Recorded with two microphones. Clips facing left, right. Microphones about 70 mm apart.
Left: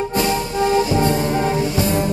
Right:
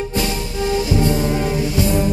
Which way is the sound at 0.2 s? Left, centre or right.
Left.